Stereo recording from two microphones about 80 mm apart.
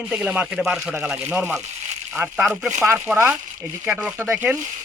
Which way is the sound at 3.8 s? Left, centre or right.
Centre.